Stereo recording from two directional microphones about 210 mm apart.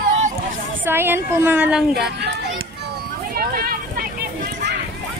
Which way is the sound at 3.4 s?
45° right (ahead or behind).